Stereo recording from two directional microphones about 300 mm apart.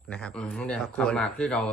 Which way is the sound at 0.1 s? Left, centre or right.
Centre.